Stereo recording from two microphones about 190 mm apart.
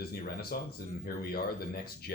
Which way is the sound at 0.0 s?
55° left (ahead or behind).